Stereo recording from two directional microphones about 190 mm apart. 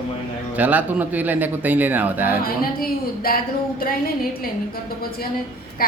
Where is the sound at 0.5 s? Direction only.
10° right (ahead or behind).